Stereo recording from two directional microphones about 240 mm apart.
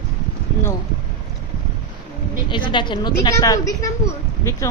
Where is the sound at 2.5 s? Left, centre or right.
Centre.